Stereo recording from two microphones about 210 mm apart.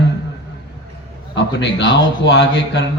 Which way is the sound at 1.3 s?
55° left (ahead or behind).